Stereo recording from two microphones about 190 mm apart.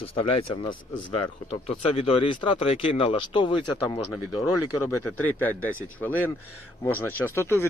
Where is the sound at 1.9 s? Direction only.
30° left (ahead or behind).